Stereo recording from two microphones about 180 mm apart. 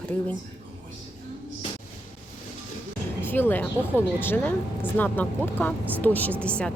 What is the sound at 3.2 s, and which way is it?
A woman's voice, 10° left (ahead or behind).